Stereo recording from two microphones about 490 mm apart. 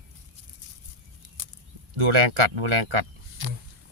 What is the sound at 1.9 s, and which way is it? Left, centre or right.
Speech, right.